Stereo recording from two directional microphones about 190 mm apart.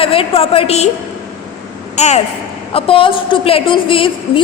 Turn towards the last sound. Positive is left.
turn(degrees=25)  # may be behind; listen again after turning